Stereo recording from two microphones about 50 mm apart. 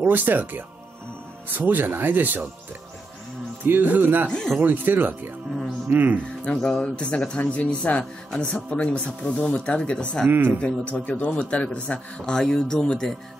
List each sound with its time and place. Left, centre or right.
0.0 s speech: right
3.6 s speech: right
4.3 s speech: centre
4.6 s speech: right
6.5 s speech: centre
6.8 s speech: left
10.2 s speech: right
10.6 s speech: left
12.4 s speech: centre